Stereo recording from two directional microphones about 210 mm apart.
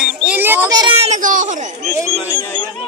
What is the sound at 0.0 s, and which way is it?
Child singing, 5° right (ahead or behind).